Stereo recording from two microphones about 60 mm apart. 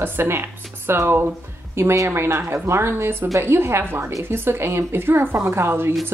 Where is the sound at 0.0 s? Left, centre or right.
Right.